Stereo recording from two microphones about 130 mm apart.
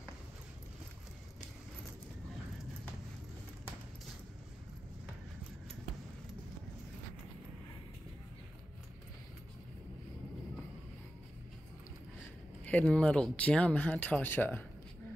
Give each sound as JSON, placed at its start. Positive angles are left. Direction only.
{"t": 12.6, "sound": "speech", "side_deg": 10}